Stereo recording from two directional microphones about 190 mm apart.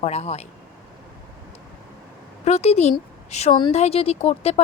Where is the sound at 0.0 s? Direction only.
35° left (ahead or behind).